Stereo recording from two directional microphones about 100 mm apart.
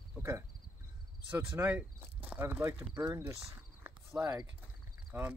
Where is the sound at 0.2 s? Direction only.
25° right (ahead or behind).